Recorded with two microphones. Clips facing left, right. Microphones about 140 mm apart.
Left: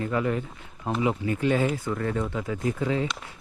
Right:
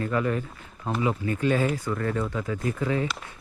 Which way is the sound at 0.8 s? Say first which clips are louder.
Left 1 dB; 70° left (ahead or behind).